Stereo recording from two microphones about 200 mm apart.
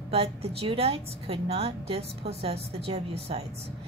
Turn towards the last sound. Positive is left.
turn(degrees=-30)  # may be behind; listen again after turning